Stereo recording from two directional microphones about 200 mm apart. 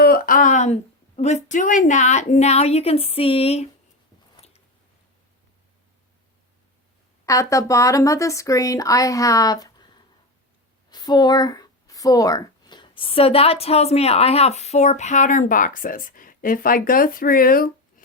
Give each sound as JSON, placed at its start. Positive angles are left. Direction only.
{"t": 0.0, "sound": "speech", "side_deg": 45}
{"t": 4.4, "sound": "biting", "side_deg": 30}
{"t": 7.3, "sound": "speech", "side_deg": 15}
{"t": 10.8, "sound": "speech", "side_deg": 20}